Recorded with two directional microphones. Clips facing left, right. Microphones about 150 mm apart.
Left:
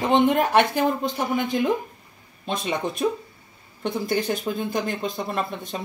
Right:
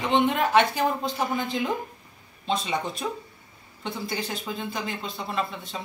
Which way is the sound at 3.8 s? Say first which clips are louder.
Left 7 dB; 50° left (ahead or behind).